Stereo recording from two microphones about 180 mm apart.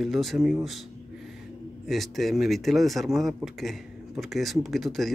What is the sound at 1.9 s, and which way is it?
Speech, centre (ahead or behind).